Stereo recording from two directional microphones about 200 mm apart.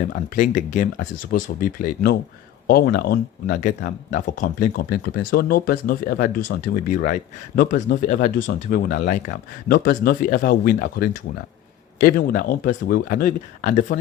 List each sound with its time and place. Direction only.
0.1 s speech: 40° left (ahead or behind)